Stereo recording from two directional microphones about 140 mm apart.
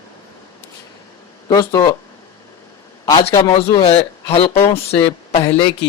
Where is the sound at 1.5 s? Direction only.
25° left (ahead or behind).